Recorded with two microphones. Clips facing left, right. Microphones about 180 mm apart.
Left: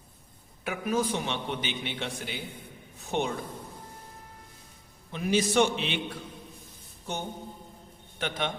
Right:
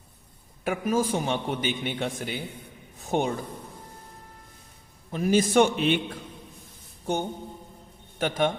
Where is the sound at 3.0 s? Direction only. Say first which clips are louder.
Right 4 dB; 45° right (ahead or behind).